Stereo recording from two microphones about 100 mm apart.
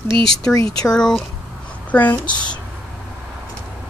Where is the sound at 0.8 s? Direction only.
5° left (ahead or behind).